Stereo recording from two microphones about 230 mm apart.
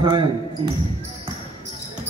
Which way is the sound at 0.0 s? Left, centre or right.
Centre.